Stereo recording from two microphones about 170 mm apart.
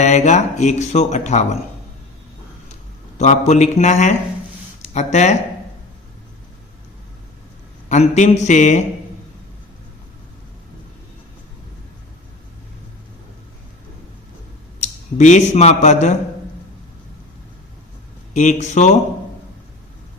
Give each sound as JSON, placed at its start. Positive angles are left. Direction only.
{"t": 0.0, "sound": "speech", "side_deg": 40}
{"t": 3.2, "sound": "speech", "side_deg": 45}
{"t": 7.9, "sound": "speech", "side_deg": 45}
{"t": 14.8, "sound": "speech", "side_deg": 45}
{"t": 18.3, "sound": "speech", "side_deg": 45}